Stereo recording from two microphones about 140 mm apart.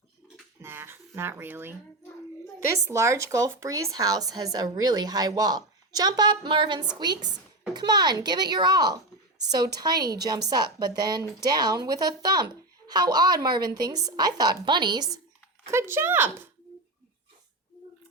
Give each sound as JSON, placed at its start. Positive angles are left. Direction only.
{"t": 0.6, "sound": "a child's voice", "side_deg": -15}
{"t": 15.7, "sound": "speech", "side_deg": -20}